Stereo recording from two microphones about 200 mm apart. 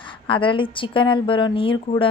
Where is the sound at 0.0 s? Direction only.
25° left (ahead or behind).